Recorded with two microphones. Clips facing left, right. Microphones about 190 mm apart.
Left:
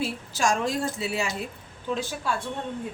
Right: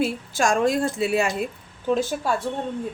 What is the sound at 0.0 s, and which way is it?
Speech, 55° right (ahead or behind).